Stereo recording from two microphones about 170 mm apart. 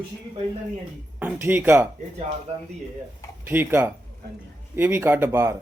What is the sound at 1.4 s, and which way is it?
Speech, 10° right (ahead or behind).